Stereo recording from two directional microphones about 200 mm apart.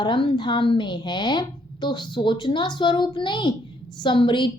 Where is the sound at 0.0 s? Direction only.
25° left (ahead or behind).